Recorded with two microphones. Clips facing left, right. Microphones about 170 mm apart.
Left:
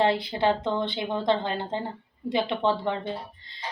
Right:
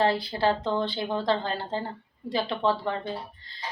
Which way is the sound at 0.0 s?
20° left (ahead or behind).